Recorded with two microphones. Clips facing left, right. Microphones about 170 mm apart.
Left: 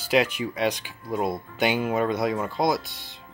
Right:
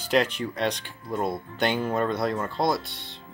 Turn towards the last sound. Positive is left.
turn(degrees=0)  # may be behind; listen again after turning